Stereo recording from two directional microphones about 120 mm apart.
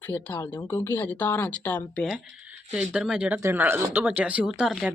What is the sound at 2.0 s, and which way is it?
Speech, 5° right (ahead or behind).